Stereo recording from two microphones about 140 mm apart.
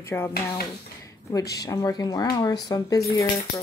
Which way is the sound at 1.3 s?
25° left (ahead or behind).